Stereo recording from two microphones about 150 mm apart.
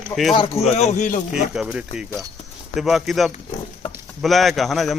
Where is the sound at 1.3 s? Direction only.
5° right (ahead or behind).